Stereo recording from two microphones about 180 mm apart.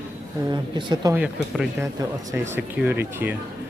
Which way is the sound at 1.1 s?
10° right (ahead or behind).